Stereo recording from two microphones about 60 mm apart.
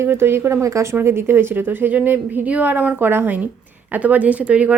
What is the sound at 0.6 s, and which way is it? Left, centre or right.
Speech, right.